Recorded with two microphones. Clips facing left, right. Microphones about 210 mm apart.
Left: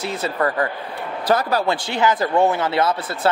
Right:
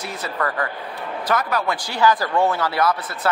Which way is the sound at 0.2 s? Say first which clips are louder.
Left 3 dB; 30° left (ahead or behind).